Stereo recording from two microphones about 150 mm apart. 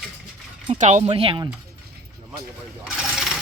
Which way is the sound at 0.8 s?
55° right (ahead or behind).